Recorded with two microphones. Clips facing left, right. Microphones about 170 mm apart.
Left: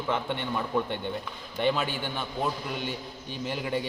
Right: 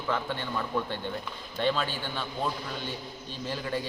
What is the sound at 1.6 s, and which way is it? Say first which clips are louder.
Speech: left 2 dB; 15° left (ahead or behind).